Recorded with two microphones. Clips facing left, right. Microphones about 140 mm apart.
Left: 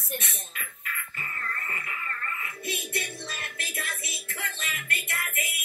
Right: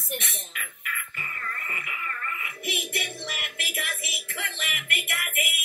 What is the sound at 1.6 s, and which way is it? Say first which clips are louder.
Music: even; 20° right (ahead or behind).